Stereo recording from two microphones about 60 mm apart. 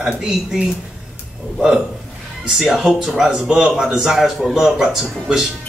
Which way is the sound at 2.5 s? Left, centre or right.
Centre.